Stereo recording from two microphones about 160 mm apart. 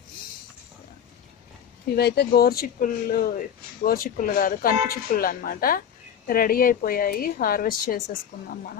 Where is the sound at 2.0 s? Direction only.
90° left; by 8.0 s 65° left (ahead or behind).